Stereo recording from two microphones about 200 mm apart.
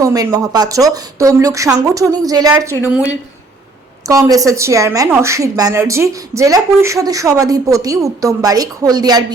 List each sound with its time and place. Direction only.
0.0 s a woman's voice: 15° right (ahead or behind)
2.9 s speech: 5° right (ahead or behind)
4.0 s a woman's voice: 15° right (ahead or behind)